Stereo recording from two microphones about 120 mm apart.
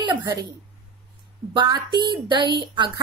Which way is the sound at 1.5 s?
40° right (ahead or behind).